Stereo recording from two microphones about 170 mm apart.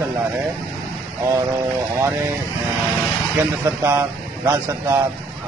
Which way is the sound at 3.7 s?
10° right (ahead or behind).